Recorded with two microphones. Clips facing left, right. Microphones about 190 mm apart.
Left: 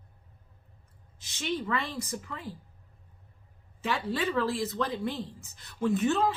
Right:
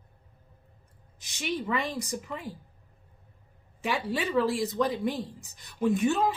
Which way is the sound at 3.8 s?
15° right (ahead or behind).